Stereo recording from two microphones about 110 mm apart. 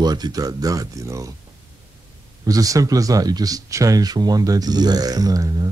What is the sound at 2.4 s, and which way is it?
Speech, 30° right (ahead or behind).